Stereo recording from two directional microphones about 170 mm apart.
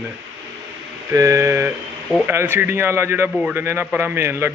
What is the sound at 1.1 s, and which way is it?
A man's voice, 20° right (ahead or behind).